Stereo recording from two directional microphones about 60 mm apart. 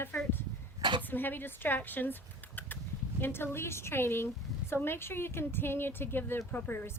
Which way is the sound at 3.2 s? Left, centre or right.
Left.